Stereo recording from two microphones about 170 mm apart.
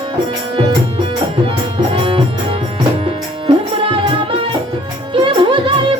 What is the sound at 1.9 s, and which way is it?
Music, 30° right (ahead or behind).